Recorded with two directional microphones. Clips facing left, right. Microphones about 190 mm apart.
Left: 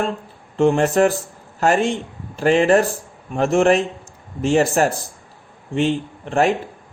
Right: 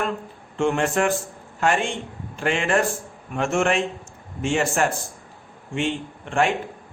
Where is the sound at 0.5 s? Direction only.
35° left (ahead or behind).